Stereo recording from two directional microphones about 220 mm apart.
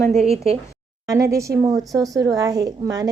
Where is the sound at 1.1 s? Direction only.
15° right (ahead or behind).